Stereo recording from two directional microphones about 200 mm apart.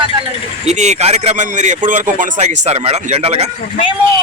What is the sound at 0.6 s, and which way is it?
Speech, 35° right (ahead or behind).